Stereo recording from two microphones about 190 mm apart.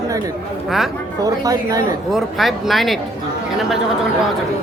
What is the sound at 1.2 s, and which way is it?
Speech, 20° right (ahead or behind).